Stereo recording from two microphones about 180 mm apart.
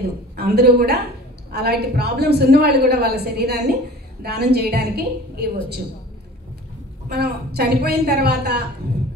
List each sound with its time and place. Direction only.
0.4 s a woman's voice: 60° right (ahead or behind)
7.1 s a woman's voice: 60° right (ahead or behind)